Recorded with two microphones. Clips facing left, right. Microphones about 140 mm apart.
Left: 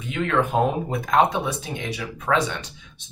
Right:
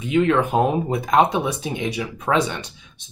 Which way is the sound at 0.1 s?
15° right (ahead or behind).